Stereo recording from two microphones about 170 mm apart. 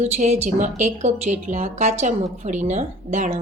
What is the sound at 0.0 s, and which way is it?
A woman's voice, 40° right (ahead or behind).